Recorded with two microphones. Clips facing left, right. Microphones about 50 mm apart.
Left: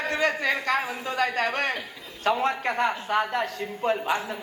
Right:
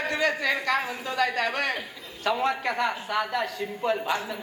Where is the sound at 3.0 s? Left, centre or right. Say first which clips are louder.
Left 2 dB; left.